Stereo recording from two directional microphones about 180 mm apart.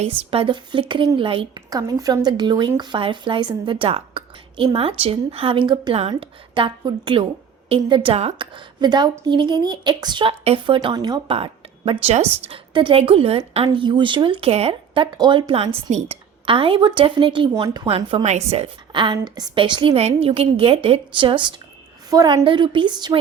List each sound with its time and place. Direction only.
0.0 s a woman's voice: 30° right (ahead or behind)